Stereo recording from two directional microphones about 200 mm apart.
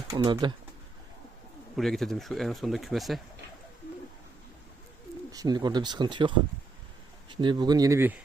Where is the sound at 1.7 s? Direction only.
Centre (ahead or behind).